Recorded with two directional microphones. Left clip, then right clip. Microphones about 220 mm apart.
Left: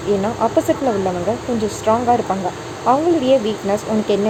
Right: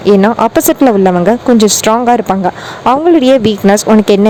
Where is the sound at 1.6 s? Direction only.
50° right (ahead or behind).